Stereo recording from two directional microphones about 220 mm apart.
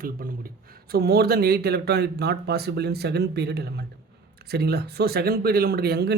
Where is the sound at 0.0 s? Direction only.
40° right (ahead or behind).